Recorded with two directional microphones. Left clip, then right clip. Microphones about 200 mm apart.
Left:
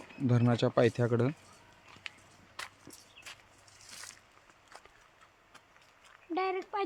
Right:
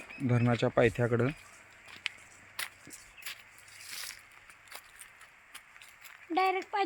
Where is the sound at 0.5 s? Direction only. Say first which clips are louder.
Right 1 dB; 10° left (ahead or behind).